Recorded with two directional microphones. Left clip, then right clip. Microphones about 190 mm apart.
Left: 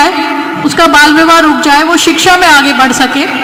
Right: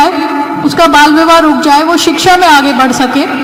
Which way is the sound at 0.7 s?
40° right (ahead or behind).